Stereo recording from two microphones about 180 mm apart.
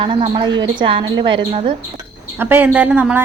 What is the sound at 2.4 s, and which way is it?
Speech, 10° right (ahead or behind).